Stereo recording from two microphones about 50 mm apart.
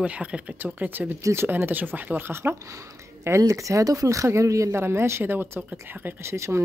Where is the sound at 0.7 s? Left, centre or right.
Right.